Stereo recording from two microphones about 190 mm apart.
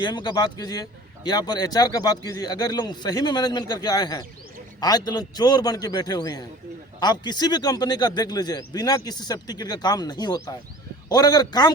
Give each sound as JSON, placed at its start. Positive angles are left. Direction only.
{"t": 0.0, "sound": "a man's voice", "side_deg": 25}